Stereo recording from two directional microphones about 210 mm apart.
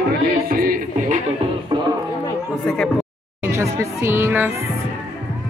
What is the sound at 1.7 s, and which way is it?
Music, 20° right (ahead or behind).